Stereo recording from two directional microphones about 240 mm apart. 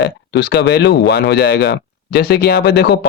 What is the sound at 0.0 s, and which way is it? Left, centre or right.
Speech, left.